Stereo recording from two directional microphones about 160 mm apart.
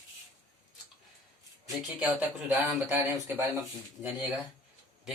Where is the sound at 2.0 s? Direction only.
10° right (ahead or behind).